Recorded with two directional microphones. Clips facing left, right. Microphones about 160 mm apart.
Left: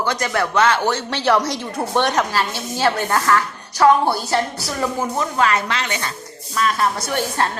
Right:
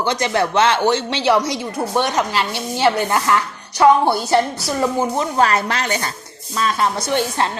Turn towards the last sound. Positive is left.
turn(degrees=-20)  # may be behind; listen again after turning